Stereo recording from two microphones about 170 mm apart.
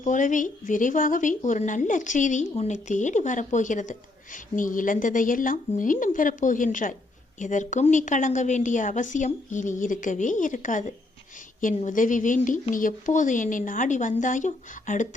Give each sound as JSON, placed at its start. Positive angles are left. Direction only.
{"t": 0.0, "sound": "speech", "side_deg": 50}